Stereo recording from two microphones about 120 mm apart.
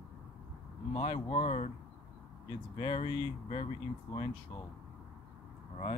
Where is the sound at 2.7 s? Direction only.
45° left (ahead or behind).